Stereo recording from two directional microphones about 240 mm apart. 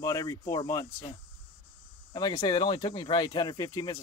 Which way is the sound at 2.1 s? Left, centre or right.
Centre.